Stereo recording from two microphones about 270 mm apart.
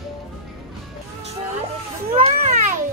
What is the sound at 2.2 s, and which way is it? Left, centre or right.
Music, right.